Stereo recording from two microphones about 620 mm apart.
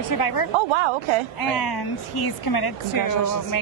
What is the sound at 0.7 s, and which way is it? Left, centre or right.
Speech, right.